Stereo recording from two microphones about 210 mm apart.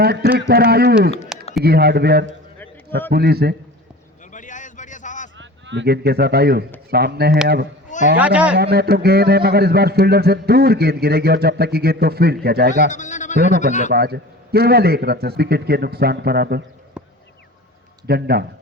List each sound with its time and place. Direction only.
0.0 s speech: 50° right (ahead or behind)
1.3 s a sound: 5° right (ahead or behind)
1.6 s speech: 50° right (ahead or behind)
4.3 s a sound: 35° left (ahead or behind)
5.4 s speech: 60° right (ahead or behind)
8.2 s speech: 5° right (ahead or behind)
8.5 s speech: 50° right (ahead or behind)
12.9 s sheep: 35° left (ahead or behind)
13.3 s speech: 50° right (ahead or behind)
17.0 s a sound: 5° right (ahead or behind)
18.0 s a man's voice: 50° right (ahead or behind)